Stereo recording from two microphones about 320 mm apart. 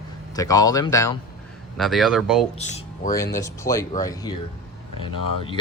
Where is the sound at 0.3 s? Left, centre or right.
Centre.